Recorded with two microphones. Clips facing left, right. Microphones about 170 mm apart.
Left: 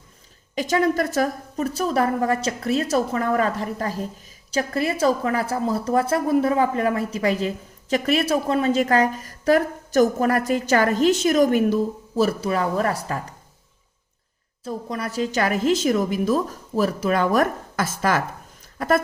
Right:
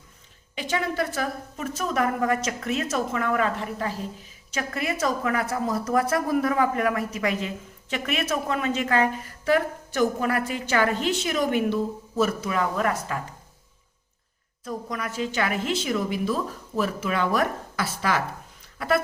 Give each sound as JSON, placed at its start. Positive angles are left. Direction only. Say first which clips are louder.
{"t": 0.5, "sound": "a woman's voice", "louder": "left 7 dB", "side_deg": 40}
{"t": 14.6, "sound": "a woman's voice", "louder": "left 3 dB", "side_deg": 30}
{"t": 18.6, "sound": "a sound", "louder": "left 3 dB", "side_deg": 45}